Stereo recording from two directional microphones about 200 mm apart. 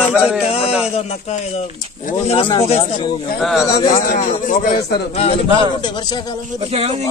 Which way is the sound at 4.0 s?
45° left (ahead or behind).